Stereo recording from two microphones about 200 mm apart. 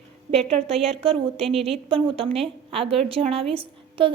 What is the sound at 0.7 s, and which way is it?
A woman's voice, centre (ahead or behind).